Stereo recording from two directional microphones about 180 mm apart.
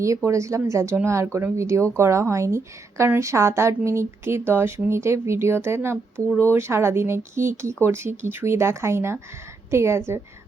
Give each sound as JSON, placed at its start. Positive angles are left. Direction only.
{"t": 0.3, "sound": "a woman's voice", "side_deg": -15}